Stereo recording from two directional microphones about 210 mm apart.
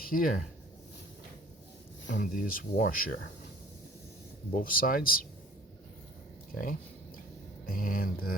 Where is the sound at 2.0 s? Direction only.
55° left (ahead or behind).